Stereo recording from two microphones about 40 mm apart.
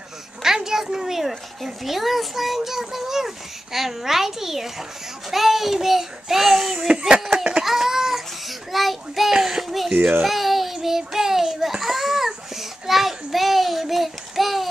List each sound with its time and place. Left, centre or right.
0.6 s a child's voice: centre
6.9 s speech: centre
7.2 s a sound: centre
7.6 s cat: centre
8.5 s a sound: centre
10.2 s child singing: centre